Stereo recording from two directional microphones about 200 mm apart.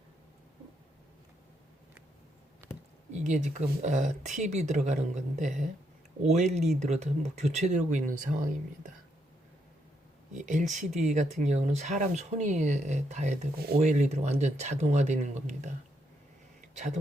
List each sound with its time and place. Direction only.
2.6 s a sound: 15° right (ahead or behind)
3.1 s speech: 35° right (ahead or behind)
10.3 s speech: 35° right (ahead or behind)
16.7 s speech: 35° right (ahead or behind)